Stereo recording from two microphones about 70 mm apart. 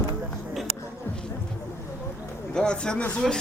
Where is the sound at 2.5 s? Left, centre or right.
Centre.